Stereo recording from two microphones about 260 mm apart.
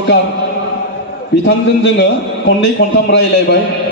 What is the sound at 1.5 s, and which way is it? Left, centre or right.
A man's voice, left.